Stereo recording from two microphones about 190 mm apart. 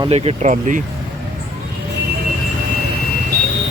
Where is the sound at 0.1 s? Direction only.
35° right (ahead or behind).